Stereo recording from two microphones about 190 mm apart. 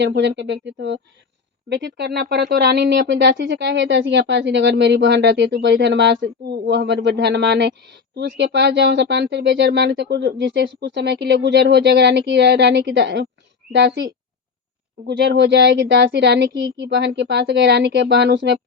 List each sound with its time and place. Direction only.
0.0 s a woman's voice: 65° right (ahead or behind)